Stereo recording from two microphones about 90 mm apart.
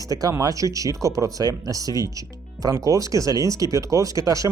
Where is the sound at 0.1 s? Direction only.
40° right (ahead or behind).